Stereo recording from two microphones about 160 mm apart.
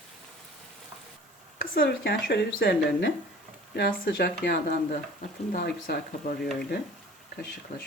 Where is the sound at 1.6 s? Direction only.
65° left (ahead or behind).